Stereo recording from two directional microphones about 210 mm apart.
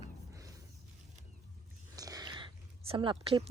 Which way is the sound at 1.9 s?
15° right (ahead or behind).